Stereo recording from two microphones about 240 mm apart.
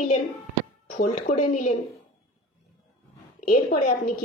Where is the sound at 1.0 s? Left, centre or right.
Left.